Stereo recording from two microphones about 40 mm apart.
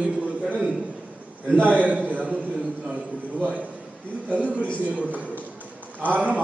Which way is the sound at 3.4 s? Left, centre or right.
Right.